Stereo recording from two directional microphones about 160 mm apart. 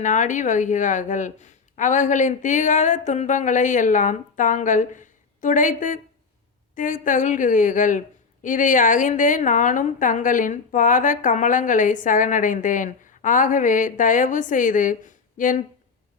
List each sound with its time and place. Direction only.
0.0 s a woman's voice: 50° left (ahead or behind)